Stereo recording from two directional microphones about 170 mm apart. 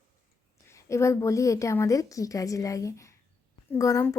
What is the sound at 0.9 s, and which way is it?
A woman's voice, 15° left (ahead or behind).